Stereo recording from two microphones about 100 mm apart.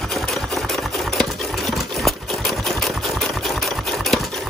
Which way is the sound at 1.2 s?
Centre (ahead or behind).